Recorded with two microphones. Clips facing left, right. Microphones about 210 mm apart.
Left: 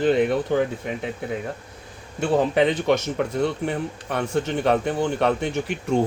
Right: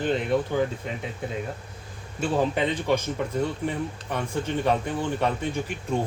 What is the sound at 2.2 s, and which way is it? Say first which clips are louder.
Speech: left 5 dB; 75° left (ahead or behind).